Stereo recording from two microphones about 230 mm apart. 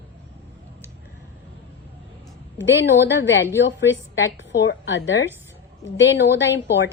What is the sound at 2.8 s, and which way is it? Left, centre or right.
A woman's voice, left.